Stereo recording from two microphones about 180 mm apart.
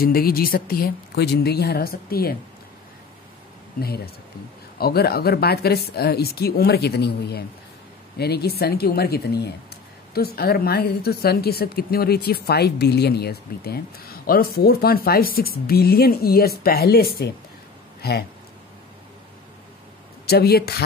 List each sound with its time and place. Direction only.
0.0 s a woman's voice: 55° left (ahead or behind)
3.8 s a woman's voice: 60° left (ahead or behind)
20.2 s a woman's voice: 60° left (ahead or behind)